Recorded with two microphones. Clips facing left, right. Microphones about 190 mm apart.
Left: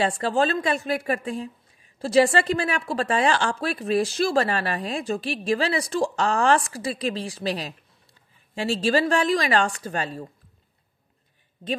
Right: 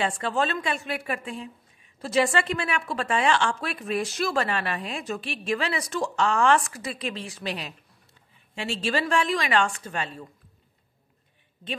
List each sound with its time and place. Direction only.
0.0 s a woman's voice: 35° left (ahead or behind)